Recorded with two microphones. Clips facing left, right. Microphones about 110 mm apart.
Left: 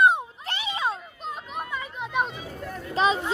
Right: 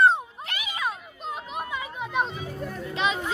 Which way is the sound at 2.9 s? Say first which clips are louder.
Left 5 dB; 35° left (ahead or behind).